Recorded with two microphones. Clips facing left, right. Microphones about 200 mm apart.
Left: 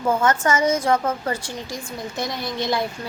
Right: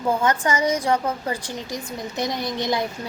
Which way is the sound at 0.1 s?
15° right (ahead or behind).